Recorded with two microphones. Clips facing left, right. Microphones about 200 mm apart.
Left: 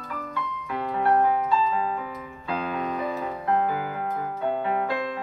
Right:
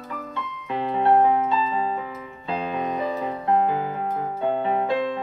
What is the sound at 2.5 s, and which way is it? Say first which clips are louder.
Music: right 2 dB; 25° right (ahead or behind).